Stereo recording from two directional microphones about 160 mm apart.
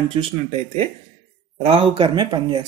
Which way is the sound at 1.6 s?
35° right (ahead or behind).